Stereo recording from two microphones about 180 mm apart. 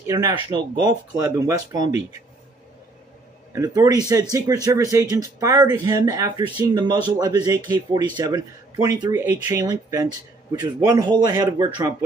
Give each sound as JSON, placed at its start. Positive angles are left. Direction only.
{"t": 0.0, "sound": "speech", "side_deg": -15}
{"t": 3.5, "sound": "speech", "side_deg": -20}